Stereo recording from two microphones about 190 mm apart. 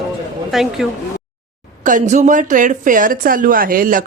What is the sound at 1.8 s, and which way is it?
Speech, 40° right (ahead or behind).